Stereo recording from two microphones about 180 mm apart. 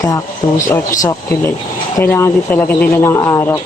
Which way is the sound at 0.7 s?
15° left (ahead or behind).